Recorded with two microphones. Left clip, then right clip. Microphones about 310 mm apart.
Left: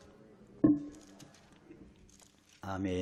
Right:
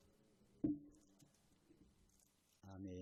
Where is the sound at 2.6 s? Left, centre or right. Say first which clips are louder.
Left 18 dB; centre.